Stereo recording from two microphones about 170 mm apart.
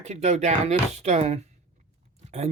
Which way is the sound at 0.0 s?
40° right (ahead or behind).